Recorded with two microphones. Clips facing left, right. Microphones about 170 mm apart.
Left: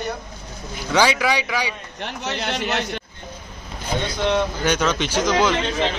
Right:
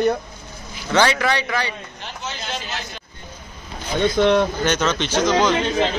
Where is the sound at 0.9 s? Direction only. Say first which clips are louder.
Right 1 dB; 10° left (ahead or behind).